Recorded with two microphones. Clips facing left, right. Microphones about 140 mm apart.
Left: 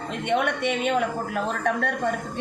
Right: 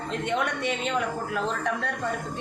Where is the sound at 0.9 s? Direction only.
55° left (ahead or behind).